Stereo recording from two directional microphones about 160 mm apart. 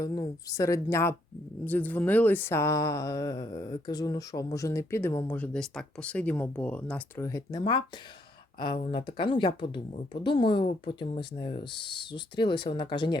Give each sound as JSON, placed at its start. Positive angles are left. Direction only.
{"t": 0.0, "sound": "speech", "side_deg": 20}